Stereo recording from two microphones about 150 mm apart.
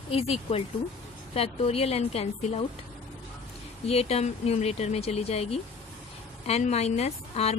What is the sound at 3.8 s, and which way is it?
A woman's voice, 40° left (ahead or behind).